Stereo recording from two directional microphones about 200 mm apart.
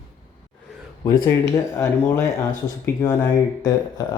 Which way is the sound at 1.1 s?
15° left (ahead or behind).